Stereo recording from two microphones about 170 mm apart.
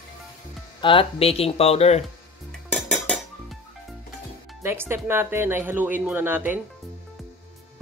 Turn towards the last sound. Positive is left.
turn(degrees=-10)  # may be behind; listen again after turning